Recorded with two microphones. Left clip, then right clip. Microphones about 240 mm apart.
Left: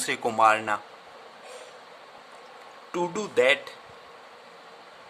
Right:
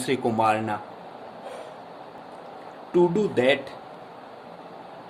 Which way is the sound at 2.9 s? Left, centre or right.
Left.